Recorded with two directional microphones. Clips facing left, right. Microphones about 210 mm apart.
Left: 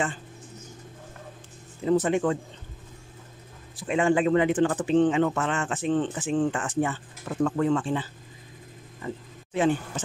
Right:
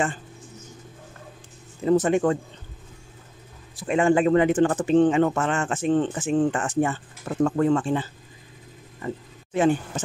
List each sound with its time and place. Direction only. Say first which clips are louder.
1.9 s speech: right 3 dB; 45° right (ahead or behind)
3.8 s speech: right 3 dB; 45° right (ahead or behind)